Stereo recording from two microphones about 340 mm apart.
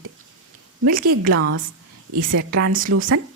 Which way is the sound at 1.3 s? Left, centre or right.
Right.